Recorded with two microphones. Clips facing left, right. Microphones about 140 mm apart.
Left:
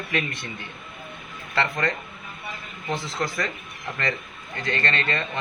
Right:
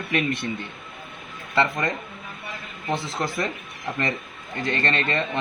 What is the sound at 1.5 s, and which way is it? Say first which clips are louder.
Speech: right 2 dB; 15° right (ahead or behind).